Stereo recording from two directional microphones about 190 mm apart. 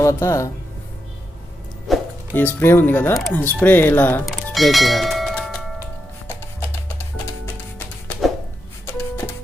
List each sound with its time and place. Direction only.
0.0 s speech: 15° left (ahead or behind)
1.9 s speech: 10° left (ahead or behind)
8.9 s music: 15° left (ahead or behind)